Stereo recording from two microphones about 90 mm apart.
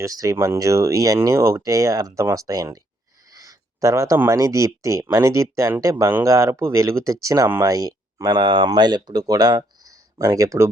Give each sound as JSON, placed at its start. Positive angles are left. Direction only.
{"t": 0.0, "sound": "speech", "side_deg": -40}
{"t": 3.3, "sound": "a sound", "side_deg": -40}
{"t": 4.3, "sound": "speech", "side_deg": -40}